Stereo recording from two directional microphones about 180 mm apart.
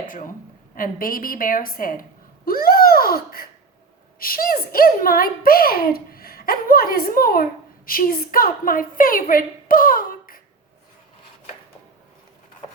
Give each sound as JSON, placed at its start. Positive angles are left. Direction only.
{"t": 0.8, "sound": "a woman's voice", "side_deg": 50}